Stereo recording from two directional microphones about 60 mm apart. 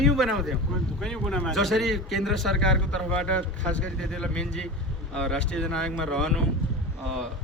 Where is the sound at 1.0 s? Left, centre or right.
Centre.